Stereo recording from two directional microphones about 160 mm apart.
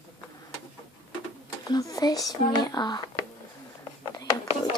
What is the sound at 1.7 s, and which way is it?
Speech, 25° left (ahead or behind).